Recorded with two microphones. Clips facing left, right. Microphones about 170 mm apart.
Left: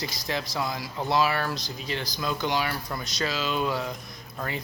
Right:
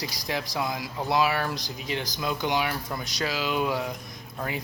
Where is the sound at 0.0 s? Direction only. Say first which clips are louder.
Even; 10° right (ahead or behind).